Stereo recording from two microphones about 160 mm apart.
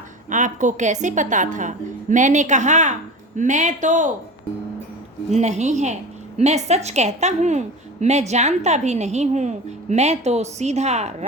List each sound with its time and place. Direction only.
0.3 s speech: 50° right (ahead or behind)
5.3 s speech: 45° right (ahead or behind)